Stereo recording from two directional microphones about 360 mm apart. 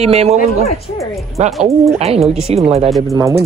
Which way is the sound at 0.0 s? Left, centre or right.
Centre.